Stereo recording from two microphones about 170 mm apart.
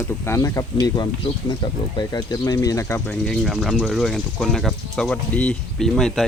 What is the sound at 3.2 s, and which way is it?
Speech, centre (ahead or behind).